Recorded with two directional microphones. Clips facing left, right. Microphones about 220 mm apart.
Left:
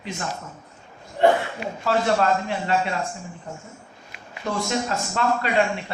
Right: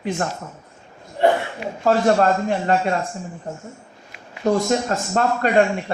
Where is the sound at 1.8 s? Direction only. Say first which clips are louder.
Right 5 dB; 45° right (ahead or behind).